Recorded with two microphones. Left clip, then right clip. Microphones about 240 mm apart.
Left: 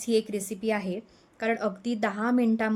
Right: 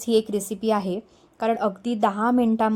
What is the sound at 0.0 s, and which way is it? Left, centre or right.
A woman's voice, centre.